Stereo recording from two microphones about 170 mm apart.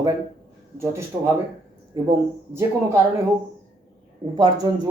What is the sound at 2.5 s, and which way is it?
Speech, 15° right (ahead or behind).